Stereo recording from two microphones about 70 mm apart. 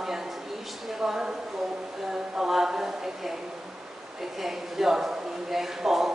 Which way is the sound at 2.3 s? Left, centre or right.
Centre.